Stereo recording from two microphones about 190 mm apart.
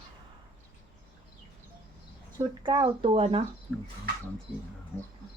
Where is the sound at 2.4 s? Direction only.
25° right (ahead or behind).